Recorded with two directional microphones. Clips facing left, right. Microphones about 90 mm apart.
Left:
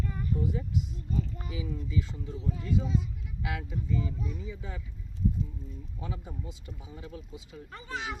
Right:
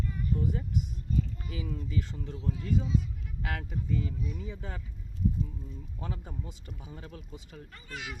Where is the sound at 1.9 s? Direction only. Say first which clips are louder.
Left 1 dB; 55° right (ahead or behind).